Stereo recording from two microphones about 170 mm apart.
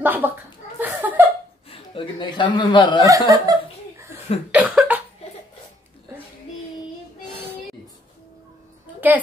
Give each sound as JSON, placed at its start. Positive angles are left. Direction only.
{"t": 0.0, "sound": "chuckle", "side_deg": -10}
{"t": 1.7, "sound": "chuckle", "side_deg": 30}
{"t": 3.1, "sound": "speech", "side_deg": -20}
{"t": 4.5, "sound": "cough", "side_deg": -10}